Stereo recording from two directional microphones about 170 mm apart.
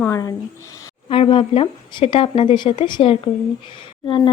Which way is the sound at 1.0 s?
30° left (ahead or behind).